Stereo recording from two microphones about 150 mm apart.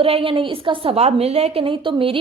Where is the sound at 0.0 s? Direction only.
40° right (ahead or behind).